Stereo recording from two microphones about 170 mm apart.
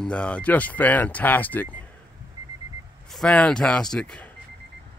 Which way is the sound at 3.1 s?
5° left (ahead or behind).